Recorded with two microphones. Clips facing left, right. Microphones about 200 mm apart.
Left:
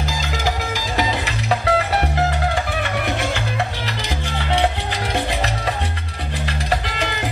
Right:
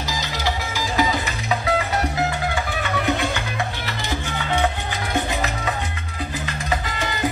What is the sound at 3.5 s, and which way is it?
Music, 35° left (ahead or behind).